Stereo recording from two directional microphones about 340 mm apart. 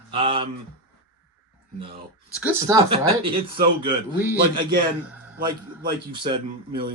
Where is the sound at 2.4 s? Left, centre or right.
Centre.